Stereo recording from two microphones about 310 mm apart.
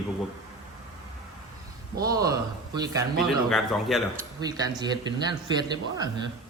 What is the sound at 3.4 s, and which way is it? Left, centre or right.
Speech, centre.